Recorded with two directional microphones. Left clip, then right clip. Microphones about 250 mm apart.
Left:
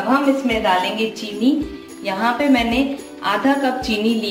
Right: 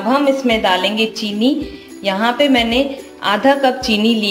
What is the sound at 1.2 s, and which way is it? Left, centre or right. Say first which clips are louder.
A woman's voice: right 2 dB; right.